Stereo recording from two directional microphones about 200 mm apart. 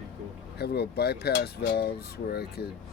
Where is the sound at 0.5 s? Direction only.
55° left (ahead or behind).